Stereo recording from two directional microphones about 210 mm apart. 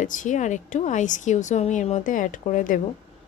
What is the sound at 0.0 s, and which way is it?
A woman's voice, 35° left (ahead or behind).